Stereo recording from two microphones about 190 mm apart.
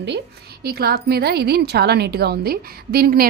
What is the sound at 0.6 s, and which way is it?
A woman's voice, 55° right (ahead or behind).